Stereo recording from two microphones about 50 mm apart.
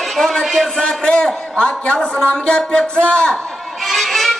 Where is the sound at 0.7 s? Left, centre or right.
Centre.